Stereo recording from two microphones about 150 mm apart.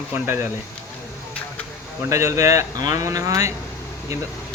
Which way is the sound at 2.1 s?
20° right (ahead or behind).